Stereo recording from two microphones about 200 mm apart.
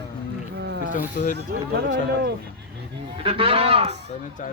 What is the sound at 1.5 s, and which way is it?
Speech, 60° right (ahead or behind).